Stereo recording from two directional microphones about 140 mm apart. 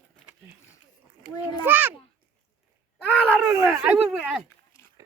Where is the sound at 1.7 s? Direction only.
15° right (ahead or behind).